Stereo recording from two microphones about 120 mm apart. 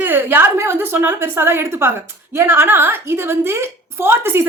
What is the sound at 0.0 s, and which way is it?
A woman's voice, 15° right (ahead or behind).